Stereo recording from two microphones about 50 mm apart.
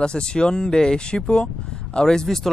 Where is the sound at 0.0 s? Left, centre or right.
Centre.